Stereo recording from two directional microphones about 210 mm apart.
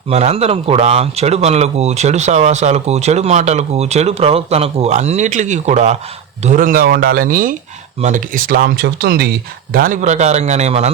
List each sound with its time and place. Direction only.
0.1 s speech: 30° right (ahead or behind)